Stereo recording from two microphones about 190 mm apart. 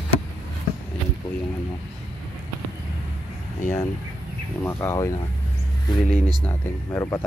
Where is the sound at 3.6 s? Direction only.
15° left (ahead or behind).